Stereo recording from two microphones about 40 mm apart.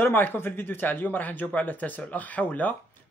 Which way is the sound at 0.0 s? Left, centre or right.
Left.